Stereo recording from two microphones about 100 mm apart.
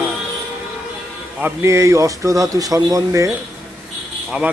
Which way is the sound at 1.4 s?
25° right (ahead or behind).